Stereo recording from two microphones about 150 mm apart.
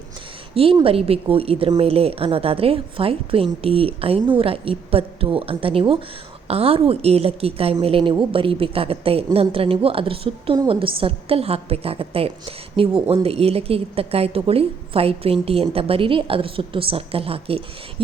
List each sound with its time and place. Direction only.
0.5 s a woman's voice: 40° right (ahead or behind)